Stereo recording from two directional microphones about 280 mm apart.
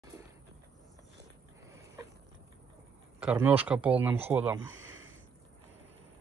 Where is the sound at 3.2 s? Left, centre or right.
Centre.